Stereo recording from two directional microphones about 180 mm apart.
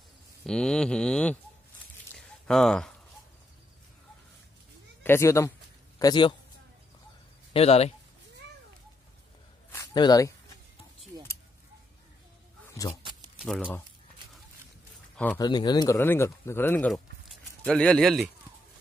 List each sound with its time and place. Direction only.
0.5 s speech: 5° left (ahead or behind)
2.1 s a sound: centre (ahead or behind)
5.0 s a man's voice: 15° left (ahead or behind)
7.5 s speech: 35° left (ahead or behind)
9.7 s a sound: 20° left (ahead or behind)
12.8 s speech: 15° left (ahead or behind)
13.4 s speech: 5° right (ahead or behind)
15.3 s speech: 25° left (ahead or behind); by 18.3 s centre (ahead or behind)